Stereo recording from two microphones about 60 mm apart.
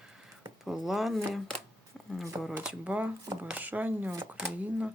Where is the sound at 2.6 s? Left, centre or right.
Centre.